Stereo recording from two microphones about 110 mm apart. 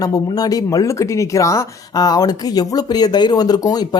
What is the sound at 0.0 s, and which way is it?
Speech, 35° left (ahead or behind).